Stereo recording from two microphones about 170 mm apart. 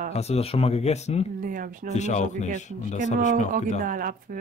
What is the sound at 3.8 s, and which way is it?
Speech, 55° right (ahead or behind).